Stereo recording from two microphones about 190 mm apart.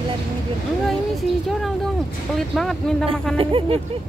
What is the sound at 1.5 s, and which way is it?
Speech, centre (ahead or behind).